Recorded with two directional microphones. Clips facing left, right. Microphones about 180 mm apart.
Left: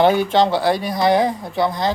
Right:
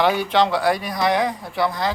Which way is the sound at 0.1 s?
45° left (ahead or behind).